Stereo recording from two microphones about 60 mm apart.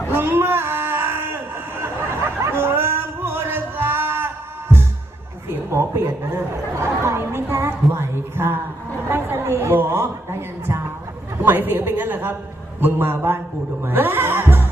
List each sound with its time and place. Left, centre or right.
0.1 s a sound: right
1.8 s music: right
5.5 s speech: right
9.0 s a sound: right
9.4 s a woman's voice: right
13.8 s music: right